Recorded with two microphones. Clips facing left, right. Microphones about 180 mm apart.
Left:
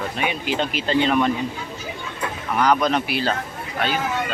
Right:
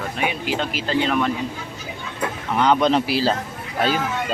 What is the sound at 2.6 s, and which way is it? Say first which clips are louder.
Speech: right 2 dB; 25° right (ahead or behind).